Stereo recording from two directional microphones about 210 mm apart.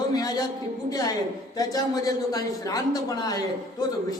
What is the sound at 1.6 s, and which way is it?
A man's voice, 15° left (ahead or behind).